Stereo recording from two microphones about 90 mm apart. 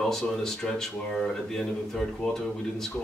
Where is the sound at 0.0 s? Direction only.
5° left (ahead or behind).